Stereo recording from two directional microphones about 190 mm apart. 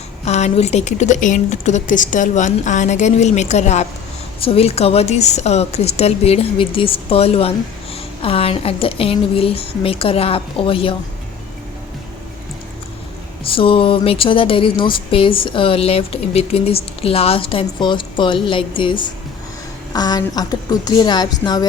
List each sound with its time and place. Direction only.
0.3 s a woman's voice: 35° left (ahead or behind)
13.4 s speech: 30° left (ahead or behind)